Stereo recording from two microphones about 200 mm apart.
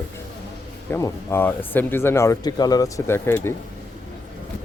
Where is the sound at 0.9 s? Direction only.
10° left (ahead or behind).